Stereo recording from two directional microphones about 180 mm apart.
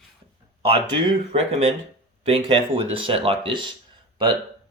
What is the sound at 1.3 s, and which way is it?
Speech, 35° right (ahead or behind).